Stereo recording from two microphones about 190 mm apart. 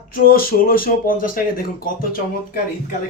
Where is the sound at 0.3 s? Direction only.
50° left (ahead or behind).